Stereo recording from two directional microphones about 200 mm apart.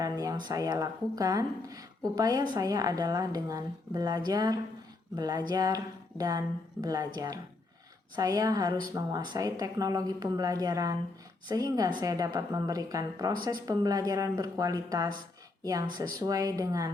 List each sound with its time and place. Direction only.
0.0 s a woman's voice: 20° right (ahead or behind)
8.1 s a woman's voice: 20° right (ahead or behind)